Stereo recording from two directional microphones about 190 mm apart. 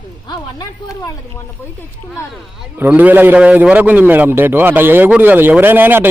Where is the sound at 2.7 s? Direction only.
10° right (ahead or behind).